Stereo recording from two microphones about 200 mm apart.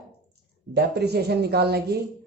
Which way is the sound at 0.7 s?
55° right (ahead or behind).